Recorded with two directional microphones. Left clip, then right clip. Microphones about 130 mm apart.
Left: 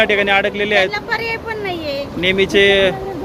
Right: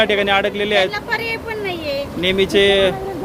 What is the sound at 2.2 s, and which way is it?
Speech, 25° right (ahead or behind).